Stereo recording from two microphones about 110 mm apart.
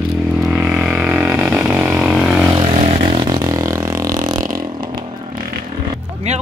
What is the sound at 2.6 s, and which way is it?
Vehicle, 70° right (ahead or behind).